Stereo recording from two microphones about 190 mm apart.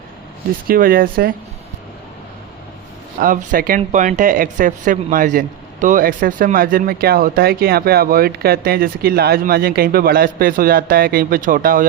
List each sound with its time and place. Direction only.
0.7 s speech: 50° right (ahead or behind)
3.2 s speech: 45° right (ahead or behind)